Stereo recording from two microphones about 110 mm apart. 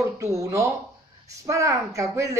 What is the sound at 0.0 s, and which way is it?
Speech, 25° right (ahead or behind).